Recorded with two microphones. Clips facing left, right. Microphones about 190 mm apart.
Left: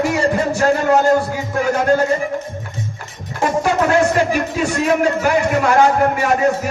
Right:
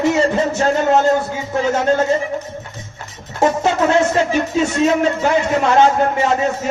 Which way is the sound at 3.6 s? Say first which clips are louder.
Left 4 dB; 25° right (ahead or behind).